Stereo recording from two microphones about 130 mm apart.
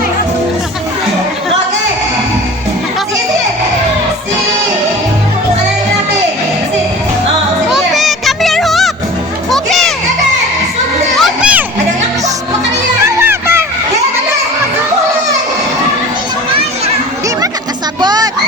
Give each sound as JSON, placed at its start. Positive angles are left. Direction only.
{"t": 7.7, "sound": "children playing", "side_deg": 0}
{"t": 9.5, "sound": "music", "side_deg": 0}
{"t": 11.2, "sound": "crowd", "side_deg": -10}
{"t": 13.1, "sound": "music", "side_deg": -20}
{"t": 18.0, "sound": "music", "side_deg": -30}